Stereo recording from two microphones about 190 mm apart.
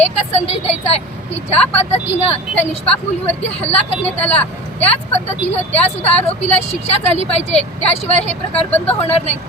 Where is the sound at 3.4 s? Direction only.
35° left (ahead or behind).